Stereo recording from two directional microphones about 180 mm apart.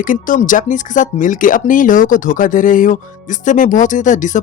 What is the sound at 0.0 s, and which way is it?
Speech, 50° left (ahead or behind).